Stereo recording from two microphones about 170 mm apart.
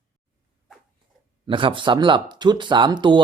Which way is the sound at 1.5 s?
30° right (ahead or behind).